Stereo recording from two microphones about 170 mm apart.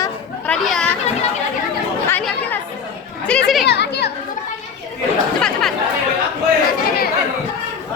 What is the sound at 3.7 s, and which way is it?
Speech, 80° left.